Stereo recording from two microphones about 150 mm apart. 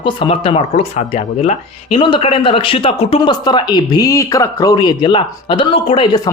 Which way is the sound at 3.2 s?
30° left (ahead or behind).